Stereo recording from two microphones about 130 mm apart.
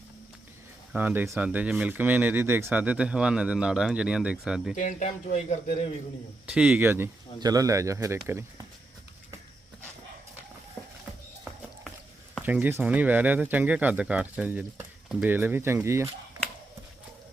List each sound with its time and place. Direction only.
0.9 s speech: 15° right (ahead or behind)
4.7 s speech: 80° left; by 5.9 s 65° left (ahead or behind)
6.4 s speech: 10° right (ahead or behind)
7.3 s speech: 30° right (ahead or behind)
10.8 s a sound: 20° left (ahead or behind)
12.4 s speech: 10° right (ahead or behind)